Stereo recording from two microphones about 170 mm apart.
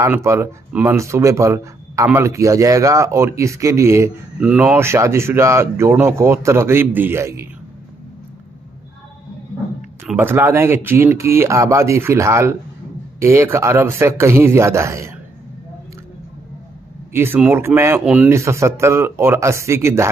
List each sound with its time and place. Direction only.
0.0 s speech: 15° right (ahead or behind)
10.1 s speech: 15° right (ahead or behind)
17.1 s speech: 10° right (ahead or behind)
18.3 s speech: 15° right (ahead or behind)